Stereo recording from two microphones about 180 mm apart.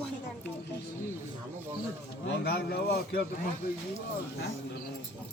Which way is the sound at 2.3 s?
65° left (ahead or behind).